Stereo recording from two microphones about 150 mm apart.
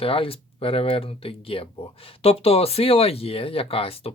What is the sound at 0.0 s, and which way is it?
Speech, 40° left (ahead or behind).